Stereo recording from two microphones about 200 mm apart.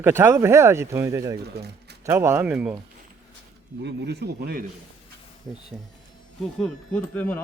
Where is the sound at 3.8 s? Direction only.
55° right (ahead or behind).